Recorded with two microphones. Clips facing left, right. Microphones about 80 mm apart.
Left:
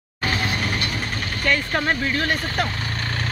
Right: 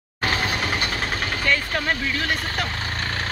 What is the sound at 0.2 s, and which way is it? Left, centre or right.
Mechanisms, right.